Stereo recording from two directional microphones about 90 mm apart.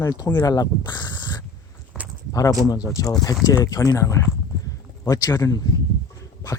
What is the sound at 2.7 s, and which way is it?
Speech, 45° left (ahead or behind).